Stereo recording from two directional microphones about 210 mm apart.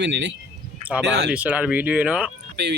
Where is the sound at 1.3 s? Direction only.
5° right (ahead or behind).